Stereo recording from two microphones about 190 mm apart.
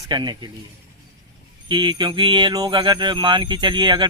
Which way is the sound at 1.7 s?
25° right (ahead or behind).